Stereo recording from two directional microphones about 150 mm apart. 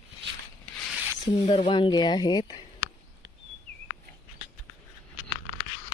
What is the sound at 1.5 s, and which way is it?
Speech, 35° left (ahead or behind).